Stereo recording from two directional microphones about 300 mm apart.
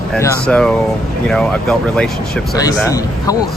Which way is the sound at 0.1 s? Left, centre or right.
Centre.